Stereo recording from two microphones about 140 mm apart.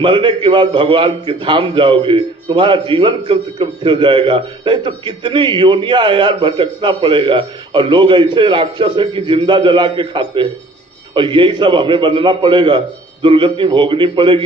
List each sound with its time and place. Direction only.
0.0 s a man's voice: 35° right (ahead or behind)